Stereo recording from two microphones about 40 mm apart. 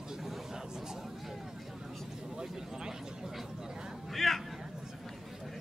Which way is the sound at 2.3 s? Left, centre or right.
Centre.